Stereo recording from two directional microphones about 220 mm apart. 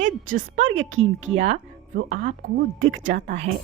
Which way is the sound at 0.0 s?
35° right (ahead or behind).